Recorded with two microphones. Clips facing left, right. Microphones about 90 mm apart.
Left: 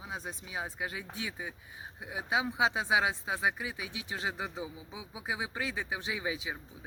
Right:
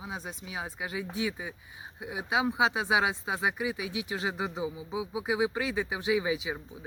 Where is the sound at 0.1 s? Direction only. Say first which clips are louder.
Left 1 dB; 5° right (ahead or behind).